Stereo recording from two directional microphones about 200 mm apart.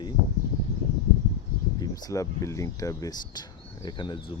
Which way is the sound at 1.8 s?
15° left (ahead or behind).